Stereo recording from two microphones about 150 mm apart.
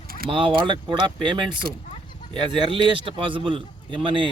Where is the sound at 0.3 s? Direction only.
35° right (ahead or behind).